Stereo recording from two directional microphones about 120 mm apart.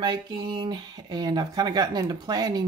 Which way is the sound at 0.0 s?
40° right (ahead or behind).